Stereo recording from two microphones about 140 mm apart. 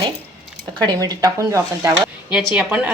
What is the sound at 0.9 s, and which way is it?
A woman's voice, 25° right (ahead or behind).